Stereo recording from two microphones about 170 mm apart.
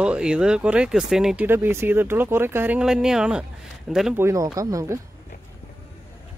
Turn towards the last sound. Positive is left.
turn(degrees=-20)  # may be behind; listen again after turning